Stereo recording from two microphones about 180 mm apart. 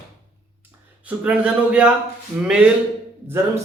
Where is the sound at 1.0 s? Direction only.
10° right (ahead or behind).